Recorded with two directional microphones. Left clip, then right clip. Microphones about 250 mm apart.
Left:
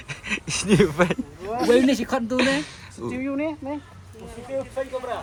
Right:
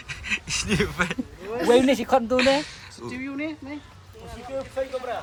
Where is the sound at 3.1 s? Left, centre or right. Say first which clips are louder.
Left 5 dB; centre.